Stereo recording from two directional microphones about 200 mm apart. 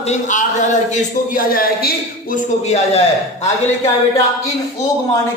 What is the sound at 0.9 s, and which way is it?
Speech, 45° left (ahead or behind).